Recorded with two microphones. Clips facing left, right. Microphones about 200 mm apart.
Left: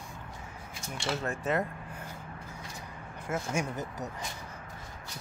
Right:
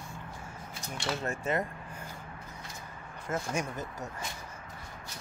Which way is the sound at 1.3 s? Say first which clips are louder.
Left 1 dB; centre (ahead or behind).